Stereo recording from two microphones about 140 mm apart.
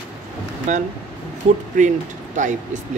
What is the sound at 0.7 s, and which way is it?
Speech, 60° right (ahead or behind).